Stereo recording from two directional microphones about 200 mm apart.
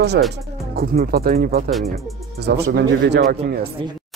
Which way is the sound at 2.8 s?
55° right (ahead or behind).